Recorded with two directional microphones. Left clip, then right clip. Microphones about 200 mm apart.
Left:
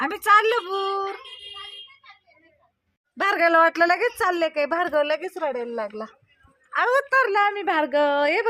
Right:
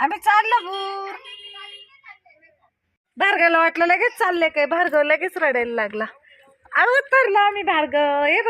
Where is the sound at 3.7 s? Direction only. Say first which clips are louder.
Right 2 dB; 15° right (ahead or behind).